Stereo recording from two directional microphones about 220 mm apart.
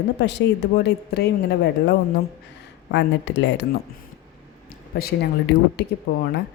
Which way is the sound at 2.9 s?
55° left (ahead or behind).